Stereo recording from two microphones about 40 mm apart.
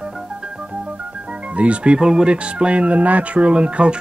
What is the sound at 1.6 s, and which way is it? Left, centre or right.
Speech, right.